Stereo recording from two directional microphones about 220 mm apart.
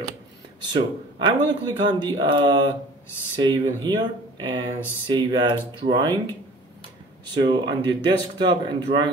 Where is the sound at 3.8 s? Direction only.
20° right (ahead or behind).